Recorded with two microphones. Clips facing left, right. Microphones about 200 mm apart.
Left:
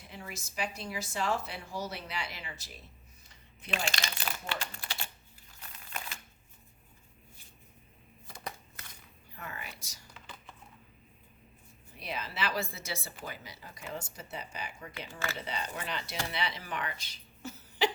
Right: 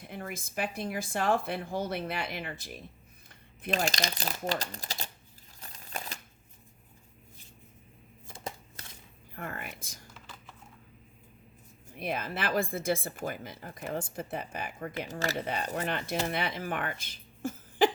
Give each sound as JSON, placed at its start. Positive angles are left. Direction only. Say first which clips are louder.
{"t": 0.1, "sound": "a woman's voice", "louder": "right 6 dB", "side_deg": -55}
{"t": 3.7, "sound": "speech", "louder": "right 6 dB", "side_deg": -40}
{"t": 5.5, "sound": "crumpling", "louder": "right 3 dB", "side_deg": -35}
{"t": 9.3, "sound": "speech", "louder": "right 5 dB", "side_deg": -50}
{"t": 11.9, "sound": "speech", "louder": "right 4 dB", "side_deg": -50}
{"t": 14.9, "sound": "speech", "louder": "right 6 dB", "side_deg": -40}
{"t": 15.4, "sound": "speech", "louder": "right 6 dB", "side_deg": -55}